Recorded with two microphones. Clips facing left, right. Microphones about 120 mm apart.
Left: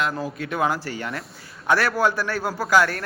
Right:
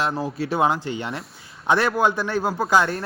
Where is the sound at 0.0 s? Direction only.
30° right (ahead or behind).